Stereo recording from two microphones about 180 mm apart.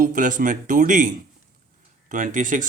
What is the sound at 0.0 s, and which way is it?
Speech, 45° right (ahead or behind).